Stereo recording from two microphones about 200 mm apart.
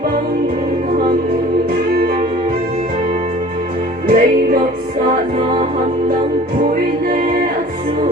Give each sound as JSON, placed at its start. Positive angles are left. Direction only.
{"t": 4.0, "sound": "music", "side_deg": -45}